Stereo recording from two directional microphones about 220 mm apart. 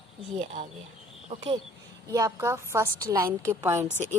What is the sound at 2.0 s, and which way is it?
A woman's voice, 15° right (ahead or behind).